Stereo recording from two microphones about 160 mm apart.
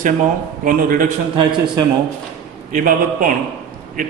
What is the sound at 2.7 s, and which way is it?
Speech, 55° right (ahead or behind).